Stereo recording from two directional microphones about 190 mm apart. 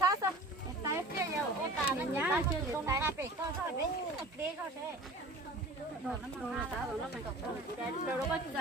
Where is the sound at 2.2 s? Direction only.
15° right (ahead or behind).